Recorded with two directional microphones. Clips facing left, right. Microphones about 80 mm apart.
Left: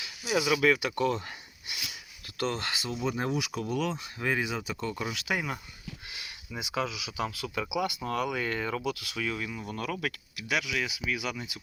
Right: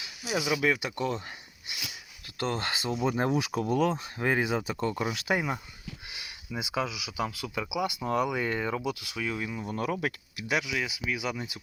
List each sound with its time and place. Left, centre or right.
0.3 s speech: right
2.4 s speech: right
6.1 s speech: centre